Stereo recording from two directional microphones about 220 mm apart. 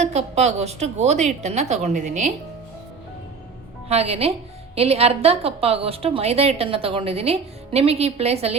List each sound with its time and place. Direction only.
0.0 s a woman's voice: 30° right (ahead or behind)
3.8 s speech: 30° right (ahead or behind)